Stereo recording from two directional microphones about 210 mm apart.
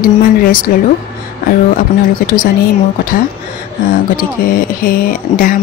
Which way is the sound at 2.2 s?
45° left (ahead or behind).